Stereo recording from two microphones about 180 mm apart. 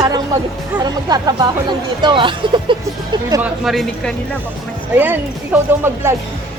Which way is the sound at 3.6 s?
Centre (ahead or behind).